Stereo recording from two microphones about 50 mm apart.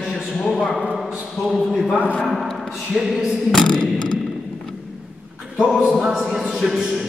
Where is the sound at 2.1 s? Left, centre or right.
Centre.